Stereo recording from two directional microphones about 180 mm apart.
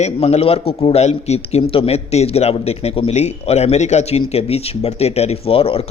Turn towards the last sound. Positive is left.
turn(degrees=30)  # may be behind; listen again after turning